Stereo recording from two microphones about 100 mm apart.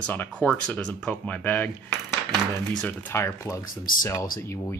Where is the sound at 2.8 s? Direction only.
25° left (ahead or behind).